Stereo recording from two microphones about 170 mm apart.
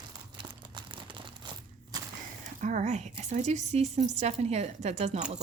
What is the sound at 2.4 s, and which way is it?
Speech, 45° right (ahead or behind).